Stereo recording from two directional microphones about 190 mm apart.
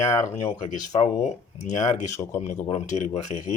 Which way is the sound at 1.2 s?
40° left (ahead or behind).